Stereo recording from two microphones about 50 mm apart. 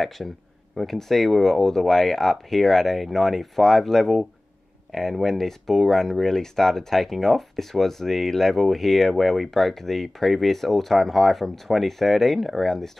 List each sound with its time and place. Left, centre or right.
0.2 s speech: centre